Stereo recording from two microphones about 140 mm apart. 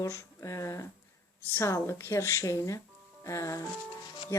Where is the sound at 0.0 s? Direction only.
25° left (ahead or behind).